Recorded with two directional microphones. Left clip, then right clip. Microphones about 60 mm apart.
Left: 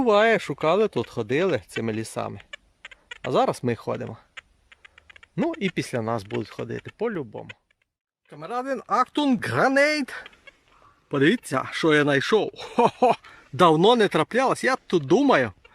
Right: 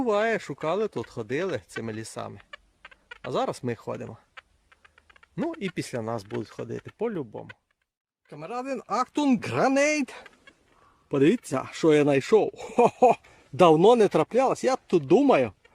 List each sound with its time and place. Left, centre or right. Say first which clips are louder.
0.0 s speech: left 6 dB; centre
6.9 s speech: left 2 dB; right
8.4 s speech: left 4 dB; right
11.1 s speech: left 1 dB; right
14.6 s speech: left 1 dB; right